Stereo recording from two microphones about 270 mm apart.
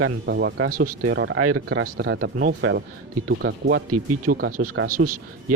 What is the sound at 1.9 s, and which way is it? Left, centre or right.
Speech, right.